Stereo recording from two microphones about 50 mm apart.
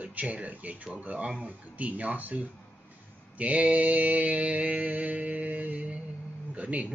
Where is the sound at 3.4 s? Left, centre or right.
Right.